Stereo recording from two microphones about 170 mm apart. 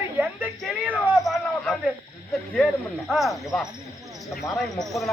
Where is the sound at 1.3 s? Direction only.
Centre (ahead or behind).